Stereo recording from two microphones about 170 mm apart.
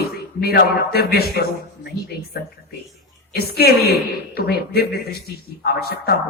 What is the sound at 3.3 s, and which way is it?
Speech, 65° left (ahead or behind).